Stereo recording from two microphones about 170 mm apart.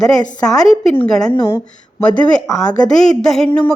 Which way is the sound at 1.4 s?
20° left (ahead or behind).